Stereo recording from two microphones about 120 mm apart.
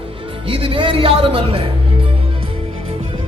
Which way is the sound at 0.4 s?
50° right (ahead or behind).